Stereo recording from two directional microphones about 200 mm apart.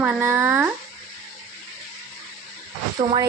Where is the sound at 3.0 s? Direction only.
25° right (ahead or behind).